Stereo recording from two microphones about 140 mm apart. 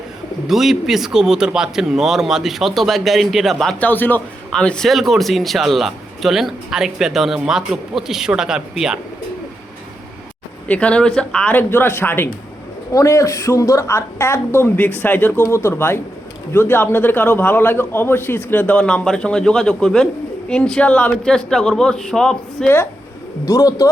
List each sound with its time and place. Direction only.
0.4 s speech: centre (ahead or behind)
10.7 s a man's voice: 10° left (ahead or behind)
23.5 s speech: 25° left (ahead or behind)